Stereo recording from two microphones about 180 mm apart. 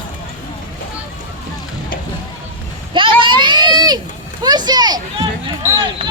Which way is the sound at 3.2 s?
25° right (ahead or behind).